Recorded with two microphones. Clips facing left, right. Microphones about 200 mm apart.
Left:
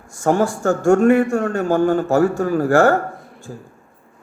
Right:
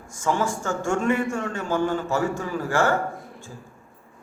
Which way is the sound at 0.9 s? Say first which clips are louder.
Left 10 dB; 55° left (ahead or behind).